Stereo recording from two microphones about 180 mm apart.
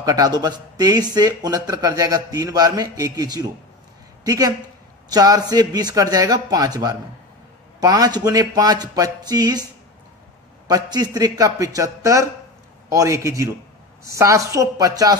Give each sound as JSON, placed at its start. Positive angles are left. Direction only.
{"t": 0.0, "sound": "speech", "side_deg": -20}
{"t": 10.7, "sound": "a woman's voice", "side_deg": -20}